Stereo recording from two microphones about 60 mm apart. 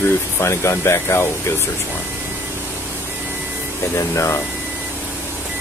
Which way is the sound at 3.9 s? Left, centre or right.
Left.